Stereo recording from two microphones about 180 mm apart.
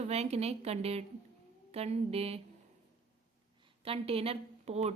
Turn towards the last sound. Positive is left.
turn(degrees=-35)  # may be behind; listen again after turning